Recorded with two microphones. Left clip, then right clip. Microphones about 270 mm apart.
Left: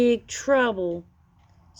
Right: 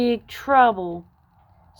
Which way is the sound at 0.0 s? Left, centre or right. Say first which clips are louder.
Left 2 dB; centre.